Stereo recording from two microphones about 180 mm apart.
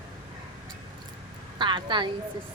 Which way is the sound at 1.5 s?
25° right (ahead or behind).